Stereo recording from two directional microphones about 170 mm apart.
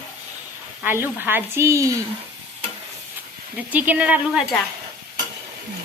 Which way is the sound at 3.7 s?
10° right (ahead or behind).